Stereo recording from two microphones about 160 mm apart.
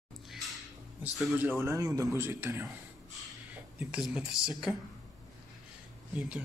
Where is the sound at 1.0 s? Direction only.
10° right (ahead or behind).